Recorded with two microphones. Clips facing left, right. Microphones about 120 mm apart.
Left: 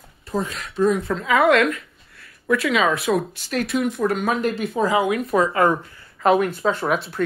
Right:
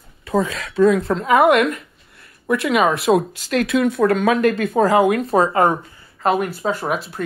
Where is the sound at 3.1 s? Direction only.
85° right; by 5.2 s 45° right (ahead or behind).